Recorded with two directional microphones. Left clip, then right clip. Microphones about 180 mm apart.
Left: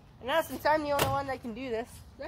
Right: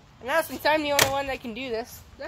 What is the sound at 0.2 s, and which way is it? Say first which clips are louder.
Speech: right 4 dB; 20° right (ahead or behind).